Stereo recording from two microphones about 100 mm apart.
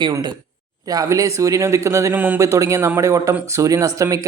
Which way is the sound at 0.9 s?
35° right (ahead or behind).